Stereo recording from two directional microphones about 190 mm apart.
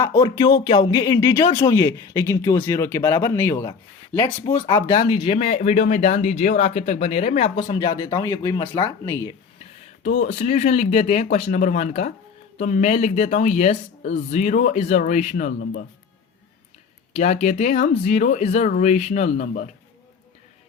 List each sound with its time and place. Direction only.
0.0 s a sound: 20° left (ahead or behind)
0.9 s speech: 20° left (ahead or behind)
4.9 s speech: 25° left (ahead or behind)
10.0 s speech: 40° left (ahead or behind)
17.2 s speech: 35° left (ahead or behind)